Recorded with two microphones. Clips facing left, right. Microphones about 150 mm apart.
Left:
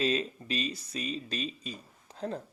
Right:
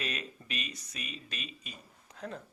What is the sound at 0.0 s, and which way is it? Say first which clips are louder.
Speech: left 10 dB; 30° left (ahead or behind).